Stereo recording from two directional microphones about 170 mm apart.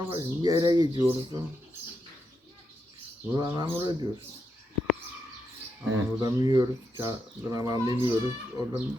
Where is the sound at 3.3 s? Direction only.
25° right (ahead or behind).